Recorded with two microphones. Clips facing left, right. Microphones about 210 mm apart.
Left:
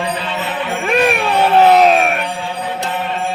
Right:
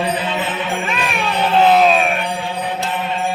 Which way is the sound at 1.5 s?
65° left (ahead or behind).